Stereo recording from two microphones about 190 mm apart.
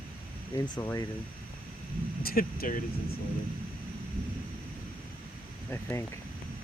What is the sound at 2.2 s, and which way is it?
Speech, 50° left (ahead or behind).